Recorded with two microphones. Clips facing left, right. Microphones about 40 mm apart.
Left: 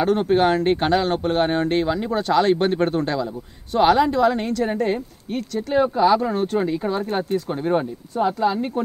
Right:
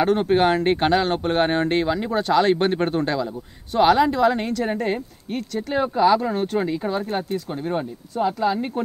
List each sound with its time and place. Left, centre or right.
0.0 s speech: centre
1.9 s speech: centre
7.3 s speech: centre
8.3 s speech: centre